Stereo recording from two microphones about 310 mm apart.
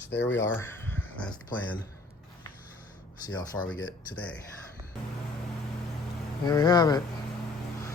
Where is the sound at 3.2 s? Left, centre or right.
Centre.